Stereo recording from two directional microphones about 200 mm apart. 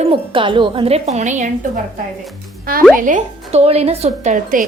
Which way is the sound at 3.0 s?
40° right (ahead or behind).